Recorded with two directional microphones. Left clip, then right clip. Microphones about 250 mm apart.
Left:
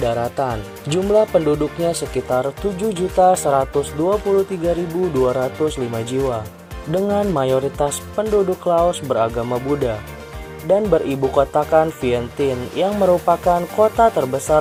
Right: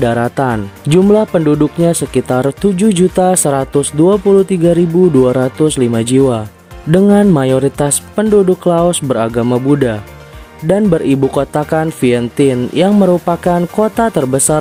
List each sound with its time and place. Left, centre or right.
0.0 s speech: right
2.4 s speech: right